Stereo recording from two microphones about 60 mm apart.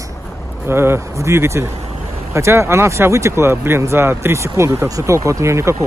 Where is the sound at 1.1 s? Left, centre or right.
Right.